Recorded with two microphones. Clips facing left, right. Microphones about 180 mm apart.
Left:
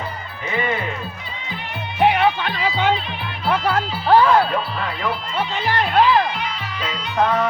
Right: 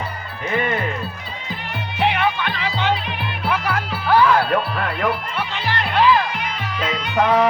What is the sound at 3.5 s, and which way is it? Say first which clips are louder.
Music: left 4 dB; 30° left (ahead or behind).